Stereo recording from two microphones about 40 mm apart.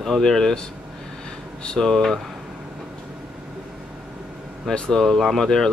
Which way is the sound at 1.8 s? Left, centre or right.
Centre.